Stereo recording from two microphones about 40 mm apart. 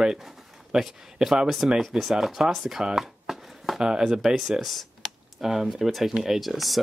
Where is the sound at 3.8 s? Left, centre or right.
Centre.